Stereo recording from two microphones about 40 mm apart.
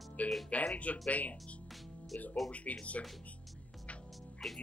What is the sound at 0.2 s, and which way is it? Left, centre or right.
Speech, left.